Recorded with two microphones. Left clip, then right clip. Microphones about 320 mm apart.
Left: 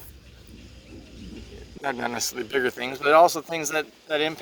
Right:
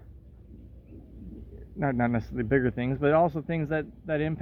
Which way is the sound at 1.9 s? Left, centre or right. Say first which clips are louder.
Left 3 dB; centre.